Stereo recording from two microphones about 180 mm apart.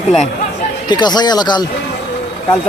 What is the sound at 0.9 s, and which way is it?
Speech, 25° left (ahead or behind).